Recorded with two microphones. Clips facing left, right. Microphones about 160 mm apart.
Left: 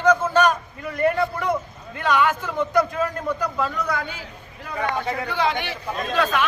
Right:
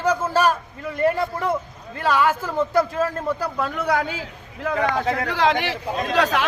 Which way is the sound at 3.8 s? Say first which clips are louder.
Right 4 dB; 80° right.